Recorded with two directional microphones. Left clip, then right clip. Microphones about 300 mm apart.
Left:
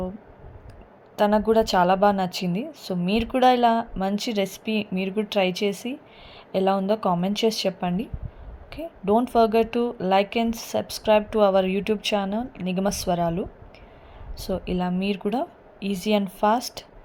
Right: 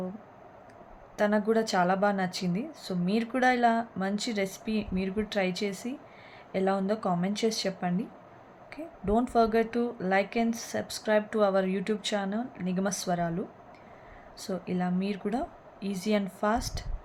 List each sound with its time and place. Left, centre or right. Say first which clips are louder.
1.1 s speech: left 7 dB; centre
14.3 s speech: left 6 dB; centre